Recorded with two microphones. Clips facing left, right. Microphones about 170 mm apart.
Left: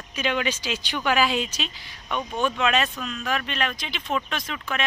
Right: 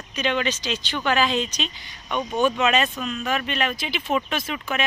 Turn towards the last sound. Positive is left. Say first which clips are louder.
# right 3 dB
turn(degrees=-5)  # may be behind; listen again after turning